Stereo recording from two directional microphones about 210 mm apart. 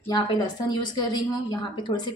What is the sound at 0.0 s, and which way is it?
A woman's voice, 20° left (ahead or behind).